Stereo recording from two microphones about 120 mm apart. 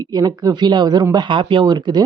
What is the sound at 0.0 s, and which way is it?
Speech, 35° right (ahead or behind).